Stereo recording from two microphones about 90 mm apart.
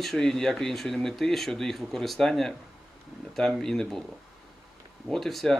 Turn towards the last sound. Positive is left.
turn(degrees=0)  # may be behind; listen again after turning